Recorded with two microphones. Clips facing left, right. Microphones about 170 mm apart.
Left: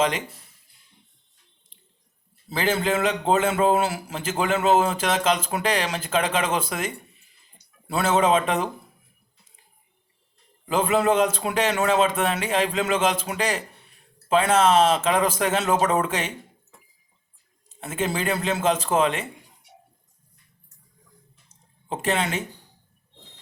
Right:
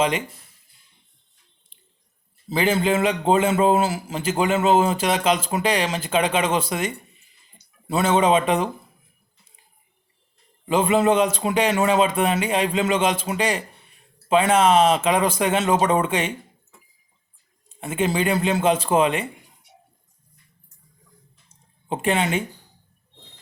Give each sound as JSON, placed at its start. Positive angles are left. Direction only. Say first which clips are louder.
{"t": 2.5, "sound": "a man's voice", "louder": "right 3 dB", "side_deg": 0}
{"t": 6.7, "sound": "a sound", "louder": "right 3 dB", "side_deg": -5}
{"t": 10.7, "sound": "a man's voice", "louder": "right 2 dB", "side_deg": 0}
{"t": 17.7, "sound": "a man's voice", "louder": "right 4 dB", "side_deg": 0}
{"t": 21.8, "sound": "a man's voice", "louder": "right 3 dB", "side_deg": 0}